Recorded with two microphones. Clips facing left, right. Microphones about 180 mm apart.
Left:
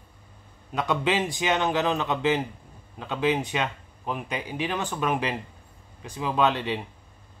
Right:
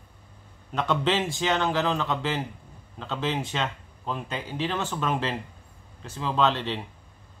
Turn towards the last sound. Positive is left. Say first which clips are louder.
# left 1 dB
turn(degrees=15)  # may be behind; listen again after turning